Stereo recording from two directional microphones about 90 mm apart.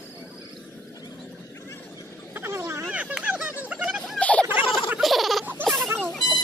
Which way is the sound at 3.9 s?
Centre (ahead or behind).